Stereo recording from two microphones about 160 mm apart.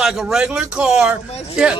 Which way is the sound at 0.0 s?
5° right (ahead or behind).